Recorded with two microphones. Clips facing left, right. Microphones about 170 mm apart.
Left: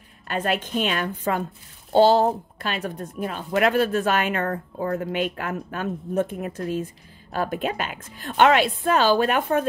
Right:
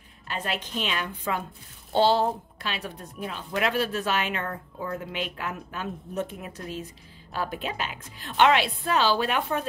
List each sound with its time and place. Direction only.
0.3 s a woman's voice: 50° left (ahead or behind)